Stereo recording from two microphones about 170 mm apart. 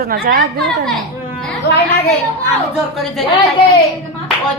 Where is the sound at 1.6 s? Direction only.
75° left (ahead or behind).